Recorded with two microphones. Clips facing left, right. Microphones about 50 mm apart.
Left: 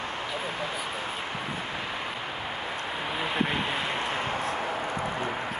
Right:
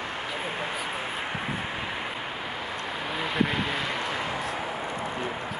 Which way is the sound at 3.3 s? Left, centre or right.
Left.